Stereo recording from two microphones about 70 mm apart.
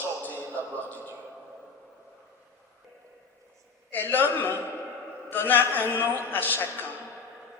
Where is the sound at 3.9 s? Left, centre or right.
Left.